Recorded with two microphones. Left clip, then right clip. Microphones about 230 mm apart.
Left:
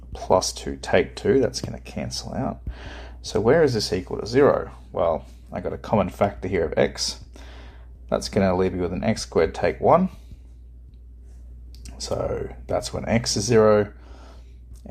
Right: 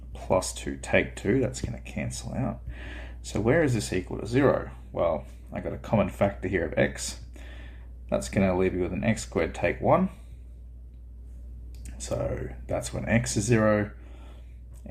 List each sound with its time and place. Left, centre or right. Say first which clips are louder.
0.1 s speech: left 6 dB; left
12.0 s speech: left 5 dB; left